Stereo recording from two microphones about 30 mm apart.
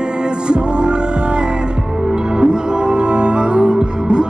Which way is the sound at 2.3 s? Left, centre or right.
Right.